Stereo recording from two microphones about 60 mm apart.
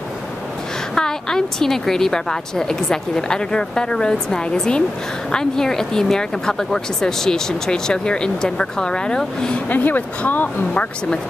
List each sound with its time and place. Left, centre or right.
0.9 s speech: centre
9.7 s speech: left